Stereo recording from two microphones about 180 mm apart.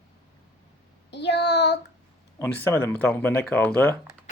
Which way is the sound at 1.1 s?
70° left (ahead or behind).